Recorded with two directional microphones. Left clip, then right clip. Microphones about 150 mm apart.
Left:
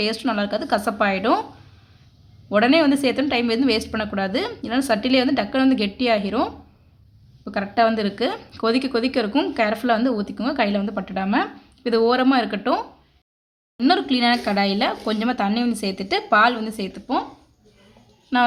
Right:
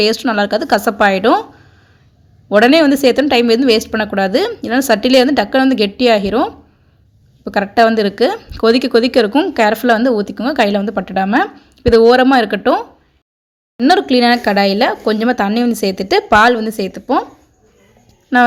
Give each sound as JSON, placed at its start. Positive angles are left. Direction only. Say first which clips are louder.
{"t": 0.0, "sound": "speech", "louder": "right 9 dB", "side_deg": -40}
{"t": 2.5, "sound": "speech", "louder": "right 8 dB", "side_deg": -40}
{"t": 7.4, "sound": "speech", "louder": "right 8 dB", "side_deg": -45}
{"t": 13.7, "sound": "speech", "louder": "right 8 dB", "side_deg": -40}
{"t": 18.3, "sound": "a woman's voice", "louder": "right 8 dB", "side_deg": -30}